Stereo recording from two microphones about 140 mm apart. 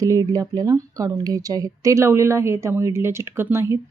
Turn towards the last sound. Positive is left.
turn(degrees=-20)  # may be behind; listen again after turning